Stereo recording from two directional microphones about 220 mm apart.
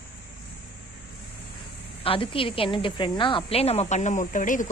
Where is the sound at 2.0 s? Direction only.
25° left (ahead or behind).